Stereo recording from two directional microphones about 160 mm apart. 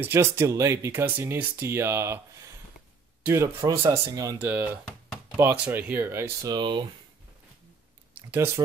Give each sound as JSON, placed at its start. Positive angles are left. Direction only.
{"t": 0.0, "sound": "speech", "side_deg": -15}
{"t": 6.5, "sound": "speech", "side_deg": -30}
{"t": 8.1, "sound": "speech", "side_deg": -15}